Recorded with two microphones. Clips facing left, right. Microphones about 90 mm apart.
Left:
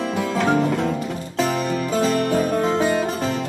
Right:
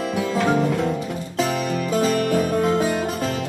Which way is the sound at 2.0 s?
Centre (ahead or behind).